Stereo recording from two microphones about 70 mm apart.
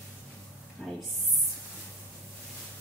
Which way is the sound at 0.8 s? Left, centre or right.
Centre.